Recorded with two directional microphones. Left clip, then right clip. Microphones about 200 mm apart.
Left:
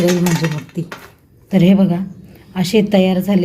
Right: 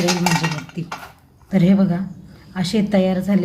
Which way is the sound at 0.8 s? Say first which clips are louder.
Left 2 dB; 15° left (ahead or behind).